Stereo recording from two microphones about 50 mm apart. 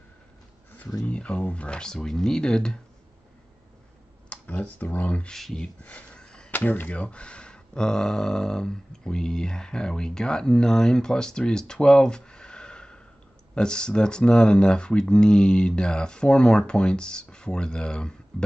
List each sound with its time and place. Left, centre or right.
0.7 s speech: left
4.3 s speech: left
5.3 s speech: centre
5.9 s a sound: left
6.5 s speech: left; by 18.1 s centre